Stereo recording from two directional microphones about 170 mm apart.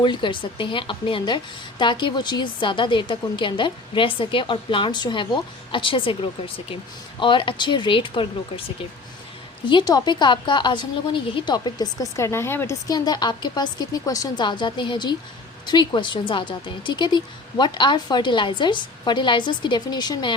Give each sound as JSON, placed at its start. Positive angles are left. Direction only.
{"t": 0.0, "sound": "a woman's voice", "side_deg": 30}
{"t": 9.6, "sound": "a woman's voice", "side_deg": 25}